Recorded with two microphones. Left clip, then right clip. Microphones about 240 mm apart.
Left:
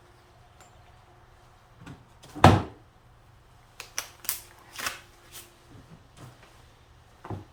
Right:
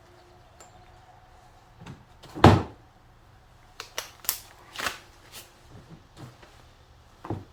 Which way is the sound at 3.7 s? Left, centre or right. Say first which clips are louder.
Right 1 dB; right.